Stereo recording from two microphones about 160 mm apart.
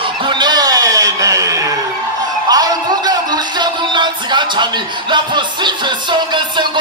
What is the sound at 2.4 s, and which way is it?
A man's voice, 25° right (ahead or behind).